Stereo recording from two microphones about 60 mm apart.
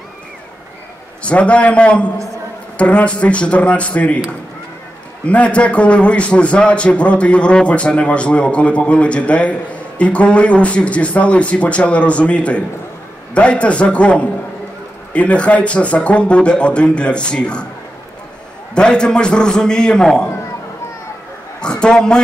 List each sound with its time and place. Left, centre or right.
1.2 s a man's voice: centre
5.2 s a man's voice: left
18.8 s a man's voice: centre
21.5 s a man's voice: centre